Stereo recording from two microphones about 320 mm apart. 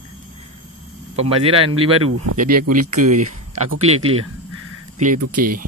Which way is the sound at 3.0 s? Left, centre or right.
Right.